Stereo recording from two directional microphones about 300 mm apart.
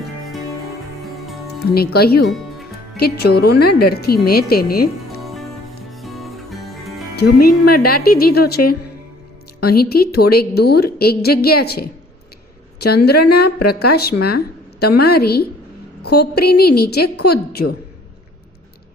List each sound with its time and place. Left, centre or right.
1.6 s a woman's voice: left
2.2 s music: centre
3.0 s a woman's voice: left
5.2 s music: centre
7.2 s a woman's voice: left
13.1 s a woman's voice: left
13.9 s a woman's voice: left